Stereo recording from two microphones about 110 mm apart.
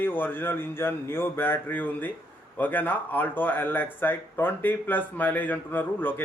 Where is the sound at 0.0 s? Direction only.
20° left (ahead or behind).